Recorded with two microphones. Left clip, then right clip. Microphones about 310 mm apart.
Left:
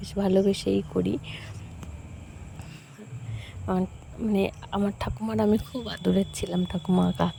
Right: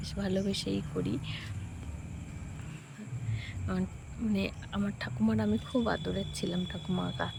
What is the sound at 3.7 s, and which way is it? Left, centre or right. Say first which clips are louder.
Speech: left 10 dB; centre.